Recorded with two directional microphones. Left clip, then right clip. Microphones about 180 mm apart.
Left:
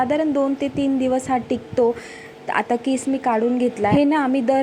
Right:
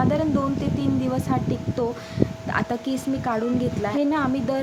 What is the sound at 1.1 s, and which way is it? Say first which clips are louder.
A woman's voice: left 5 dB; 20° left (ahead or behind).